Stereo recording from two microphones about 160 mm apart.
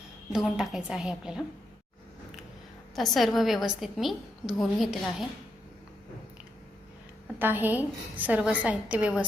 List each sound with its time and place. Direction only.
0.3 s a woman's voice: 5° right (ahead or behind)
2.9 s a woman's voice: centre (ahead or behind)
7.3 s a woman's voice: 10° right (ahead or behind)